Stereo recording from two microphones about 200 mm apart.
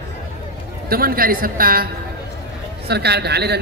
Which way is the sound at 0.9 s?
45° right (ahead or behind).